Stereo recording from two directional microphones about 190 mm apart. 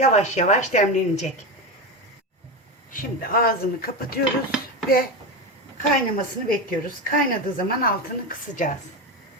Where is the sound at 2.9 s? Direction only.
45° left (ahead or behind).